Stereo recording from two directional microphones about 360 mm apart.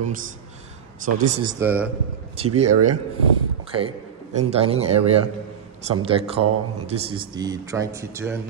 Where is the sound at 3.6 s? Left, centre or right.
Centre.